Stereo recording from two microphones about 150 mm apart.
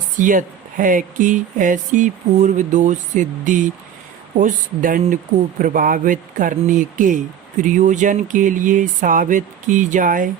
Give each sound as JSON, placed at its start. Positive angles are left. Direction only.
{"t": 0.2, "sound": "speech", "side_deg": -60}